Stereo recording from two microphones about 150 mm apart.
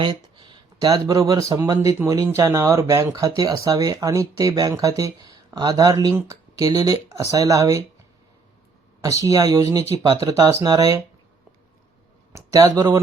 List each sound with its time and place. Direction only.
0.0 s speech: 35° right (ahead or behind)
9.0 s speech: 20° right (ahead or behind)
12.5 s speech: 25° right (ahead or behind)